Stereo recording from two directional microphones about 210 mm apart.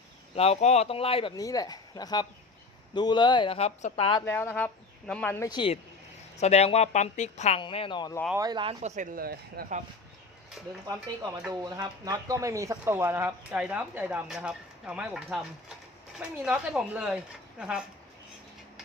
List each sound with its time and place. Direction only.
0.3 s speech: 30° left (ahead or behind)
4.3 s speech: 10° left (ahead or behind)
8.4 s speech: 20° right (ahead or behind); by 9.8 s 40° right (ahead or behind)
11.6 s speech: 20° right (ahead or behind)